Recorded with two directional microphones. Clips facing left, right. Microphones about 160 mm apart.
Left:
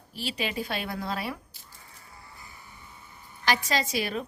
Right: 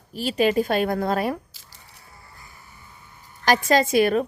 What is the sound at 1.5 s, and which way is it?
Bleat, 90° right.